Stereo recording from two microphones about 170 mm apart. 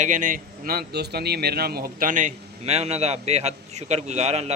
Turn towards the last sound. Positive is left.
turn(degrees=-40)  # may be behind; listen again after turning